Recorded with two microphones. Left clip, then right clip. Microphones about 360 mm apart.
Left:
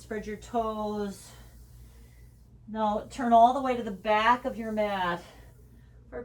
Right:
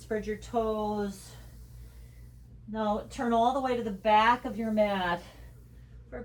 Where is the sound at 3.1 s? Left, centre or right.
Centre.